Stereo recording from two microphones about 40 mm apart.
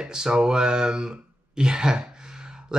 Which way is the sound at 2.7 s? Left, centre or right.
Right.